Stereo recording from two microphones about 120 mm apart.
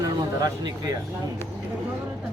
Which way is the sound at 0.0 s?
30° right (ahead or behind).